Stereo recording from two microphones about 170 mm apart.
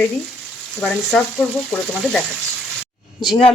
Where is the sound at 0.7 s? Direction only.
5° left (ahead or behind).